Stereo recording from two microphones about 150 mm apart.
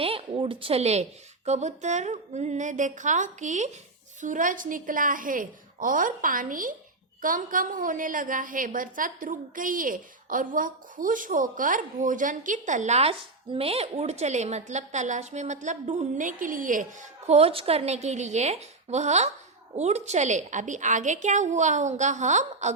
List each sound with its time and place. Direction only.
0.0 s a woman's voice: 40° right (ahead or behind)